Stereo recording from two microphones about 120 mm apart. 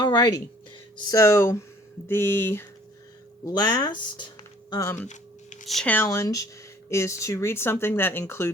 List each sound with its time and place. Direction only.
0.0 s a sound: 40° left (ahead or behind)
0.9 s speech: 35° left (ahead or behind)
1.2 s speech: 25° left (ahead or behind)
3.4 s speech: 30° left (ahead or behind)
4.8 s speech: 20° left (ahead or behind)
5.0 s a sound: 90° left
5.6 s speech: centre (ahead or behind)
6.1 s speech: 30° left (ahead or behind)